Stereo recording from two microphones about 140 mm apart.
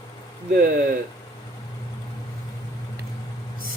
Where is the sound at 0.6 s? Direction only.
90° right.